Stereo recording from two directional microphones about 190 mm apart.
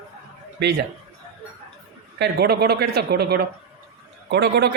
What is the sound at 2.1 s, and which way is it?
Speech, 60° right (ahead or behind).